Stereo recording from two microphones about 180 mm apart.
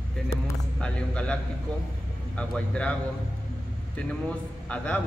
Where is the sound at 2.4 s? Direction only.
5° left (ahead or behind).